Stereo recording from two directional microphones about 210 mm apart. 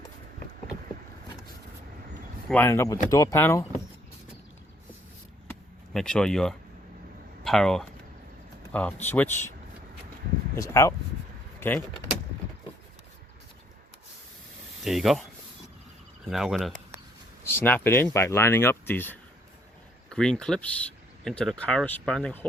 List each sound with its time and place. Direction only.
2.5 s speech: 10° left (ahead or behind)
5.9 s speech: 5° left (ahead or behind)
10.5 s speech: 15° left (ahead or behind)
14.8 s speech: centre (ahead or behind)
16.3 s speech: centre (ahead or behind)
17.4 s speech: 10° left (ahead or behind)